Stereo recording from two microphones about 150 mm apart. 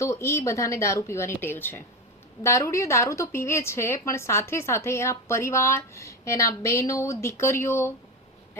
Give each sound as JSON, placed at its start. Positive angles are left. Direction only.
{"t": 0.0, "sound": "a woman's voice", "side_deg": 20}